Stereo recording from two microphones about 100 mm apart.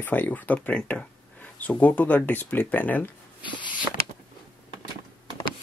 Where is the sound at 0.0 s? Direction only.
15° left (ahead or behind).